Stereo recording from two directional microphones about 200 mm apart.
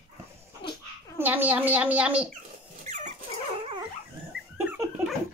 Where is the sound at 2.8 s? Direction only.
35° right (ahead or behind).